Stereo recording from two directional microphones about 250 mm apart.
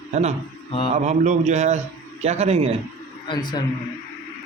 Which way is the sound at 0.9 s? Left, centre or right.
Right.